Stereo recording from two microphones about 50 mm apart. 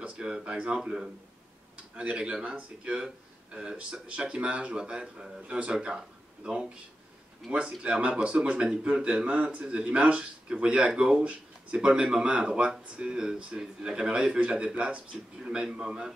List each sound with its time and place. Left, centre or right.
0.0 s a man's voice: right
7.8 s a man's voice: centre